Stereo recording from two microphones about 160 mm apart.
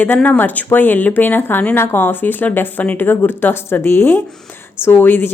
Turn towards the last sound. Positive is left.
turn(degrees=15)  # may be behind; listen again after turning